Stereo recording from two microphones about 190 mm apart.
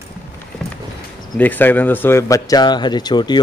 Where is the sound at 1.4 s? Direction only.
10° left (ahead or behind).